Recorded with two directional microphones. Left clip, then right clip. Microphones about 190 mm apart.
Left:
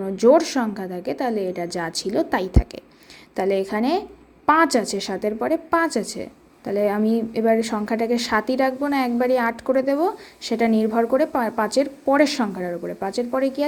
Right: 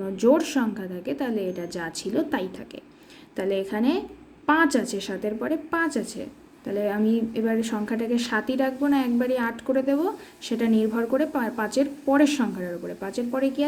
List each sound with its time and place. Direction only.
0.0 s a woman's voice: 25° left (ahead or behind)